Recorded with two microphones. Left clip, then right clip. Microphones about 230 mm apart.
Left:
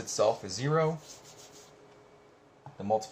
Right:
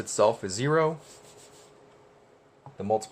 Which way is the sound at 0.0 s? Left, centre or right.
Right.